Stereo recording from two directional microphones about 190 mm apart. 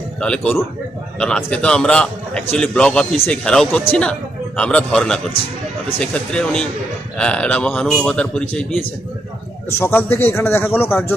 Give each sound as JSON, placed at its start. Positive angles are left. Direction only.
{"t": 0.2, "sound": "a man's voice", "side_deg": 0}